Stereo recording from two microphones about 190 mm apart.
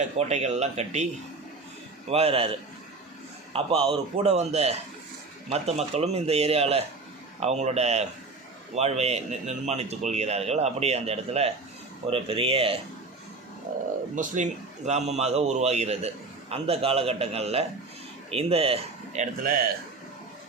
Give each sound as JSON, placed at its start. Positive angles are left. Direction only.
{"t": 0.0, "sound": "a man's voice", "side_deg": -35}
{"t": 3.5, "sound": "a man's voice", "side_deg": -30}
{"t": 14.2, "sound": "a man's voice", "side_deg": -40}